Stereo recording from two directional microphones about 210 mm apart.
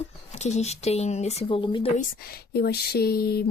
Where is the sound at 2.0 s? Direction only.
45° left (ahead or behind).